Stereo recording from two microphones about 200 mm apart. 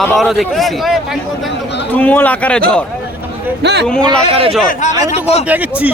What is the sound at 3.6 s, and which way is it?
Speech, 55° right (ahead or behind).